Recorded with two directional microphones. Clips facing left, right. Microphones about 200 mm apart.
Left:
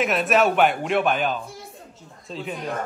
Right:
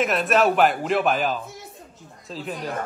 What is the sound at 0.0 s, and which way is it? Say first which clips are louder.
A man's voice: even; centre (ahead or behind).